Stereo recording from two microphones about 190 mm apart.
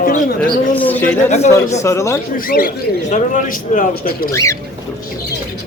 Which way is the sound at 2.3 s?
50° left (ahead or behind).